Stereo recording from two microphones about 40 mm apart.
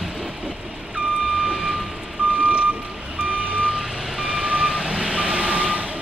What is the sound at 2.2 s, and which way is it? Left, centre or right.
Vehicle, right.